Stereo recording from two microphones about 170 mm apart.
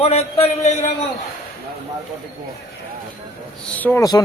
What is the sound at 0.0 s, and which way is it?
Speech, 35° left (ahead or behind).